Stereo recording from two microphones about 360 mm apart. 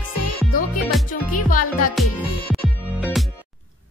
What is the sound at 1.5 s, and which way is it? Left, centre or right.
Music, left.